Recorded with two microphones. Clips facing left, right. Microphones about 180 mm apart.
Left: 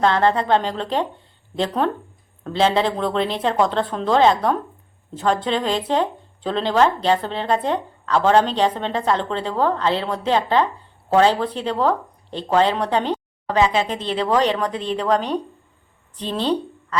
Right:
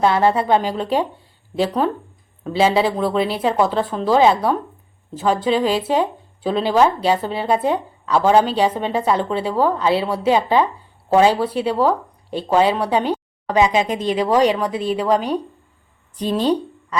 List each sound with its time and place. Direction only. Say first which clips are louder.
0.0 s a woman's voice: right 2 dB; 10° right (ahead or behind)